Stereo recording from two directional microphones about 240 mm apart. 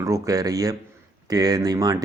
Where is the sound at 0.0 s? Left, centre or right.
Centre.